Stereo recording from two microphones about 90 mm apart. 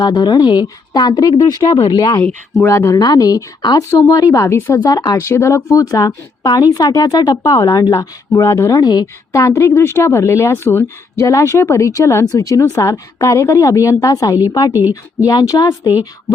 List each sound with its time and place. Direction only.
0.0 s a woman's voice: 50° left (ahead or behind)
2.6 s speech: 30° left (ahead or behind)
3.0 s speech: 45° left (ahead or behind)
3.6 s a woman's voice: 50° left (ahead or behind)
3.8 s speech: 35° left (ahead or behind)
4.9 s speech: 40° left (ahead or behind)
5.1 s speech: 30° left (ahead or behind)
8.8 s a woman's voice: 50° left (ahead or behind)
9.3 s speech: 35° left (ahead or behind)
14.7 s speech: 20° right (ahead or behind)
15.3 s a woman's voice: 45° left (ahead or behind)